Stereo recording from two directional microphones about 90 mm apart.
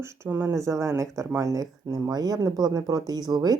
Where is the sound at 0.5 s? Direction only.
35° right (ahead or behind).